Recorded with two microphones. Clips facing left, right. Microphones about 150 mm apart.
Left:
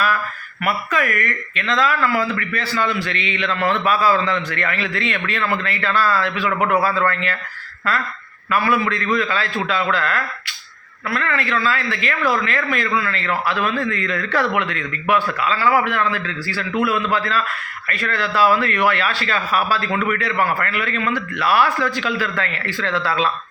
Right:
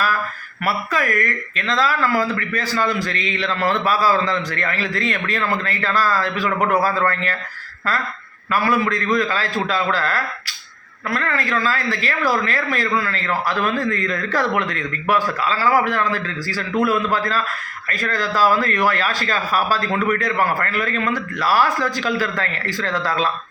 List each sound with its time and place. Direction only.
0.6 s speech: 35° right (ahead or behind)
8.4 s speech: 40° right (ahead or behind)